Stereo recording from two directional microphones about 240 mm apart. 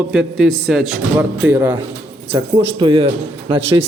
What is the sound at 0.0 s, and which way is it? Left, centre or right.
A man's voice, centre.